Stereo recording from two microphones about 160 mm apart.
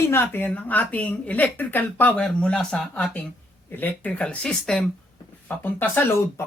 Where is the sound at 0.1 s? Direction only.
15° left (ahead or behind).